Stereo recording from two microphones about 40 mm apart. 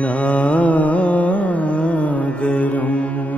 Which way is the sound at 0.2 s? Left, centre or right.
Left.